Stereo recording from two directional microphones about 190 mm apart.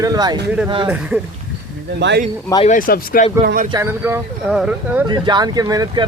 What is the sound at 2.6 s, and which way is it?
Speech, 45° left (ahead or behind).